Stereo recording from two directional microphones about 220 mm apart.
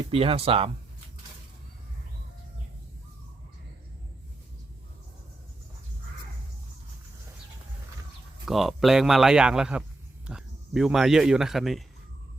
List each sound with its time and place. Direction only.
0.1 s speech: 25° right (ahead or behind)
8.4 s speech: centre (ahead or behind)